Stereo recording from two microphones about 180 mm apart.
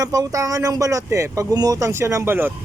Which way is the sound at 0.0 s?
20° right (ahead or behind).